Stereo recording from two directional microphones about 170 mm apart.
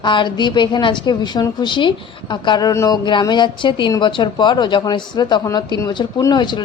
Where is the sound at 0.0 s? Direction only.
25° left (ahead or behind).